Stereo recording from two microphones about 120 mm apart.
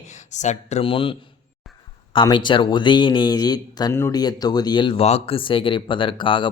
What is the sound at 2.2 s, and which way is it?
Speech, 40° left (ahead or behind).